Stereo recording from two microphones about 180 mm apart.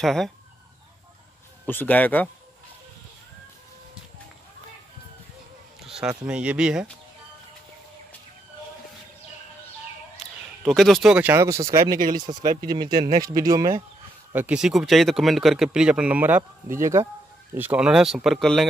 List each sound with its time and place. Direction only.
0.0 s speech: centre (ahead or behind)
1.7 s speech: 10° left (ahead or behind)
5.9 s speech: 5° right (ahead or behind)
10.1 s speech: centre (ahead or behind); by 13.8 s 20° right (ahead or behind)
14.3 s speech: 5° right (ahead or behind)